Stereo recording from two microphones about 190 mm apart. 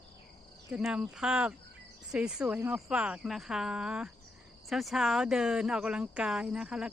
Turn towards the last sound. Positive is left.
turn(degrees=-5)  # may be behind; listen again after turning